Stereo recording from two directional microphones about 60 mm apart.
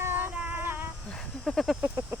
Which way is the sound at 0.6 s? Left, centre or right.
Right.